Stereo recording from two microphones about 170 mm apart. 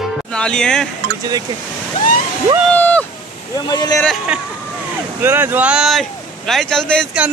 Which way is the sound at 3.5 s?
25° left (ahead or behind).